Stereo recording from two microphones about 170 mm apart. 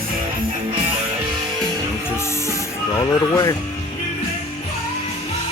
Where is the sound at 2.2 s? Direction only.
15° left (ahead or behind).